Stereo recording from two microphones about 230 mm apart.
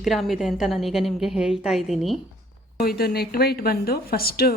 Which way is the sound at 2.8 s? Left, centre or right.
Left.